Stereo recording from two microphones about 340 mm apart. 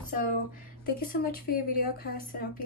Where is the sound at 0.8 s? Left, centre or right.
Left.